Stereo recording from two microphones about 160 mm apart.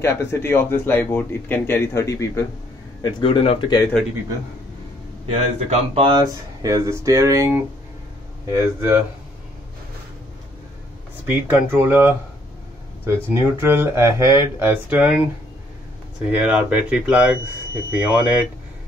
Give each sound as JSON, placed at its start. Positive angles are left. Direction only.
{"t": 0.0, "sound": "speech", "side_deg": 15}
{"t": 3.0, "sound": "speech", "side_deg": 30}
{"t": 5.3, "sound": "speech", "side_deg": -35}
{"t": 8.5, "sound": "speech", "side_deg": -15}
{"t": 11.2, "sound": "speech", "side_deg": -15}
{"t": 13.3, "sound": "speech", "side_deg": -15}
{"t": 16.3, "sound": "speech", "side_deg": -10}